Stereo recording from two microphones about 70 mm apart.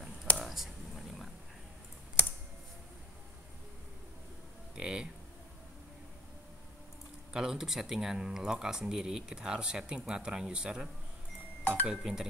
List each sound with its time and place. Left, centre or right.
0.4 s a sound: centre
4.7 s speech: centre
7.3 s speech: centre
11.6 s speech: right
11.9 s speech: centre